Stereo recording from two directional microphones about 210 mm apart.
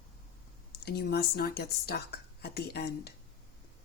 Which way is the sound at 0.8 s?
50° left (ahead or behind).